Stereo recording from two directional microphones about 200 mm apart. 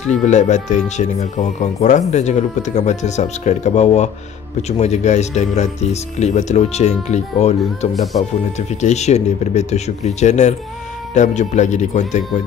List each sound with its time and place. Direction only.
0.1 s speech: 35° left (ahead or behind)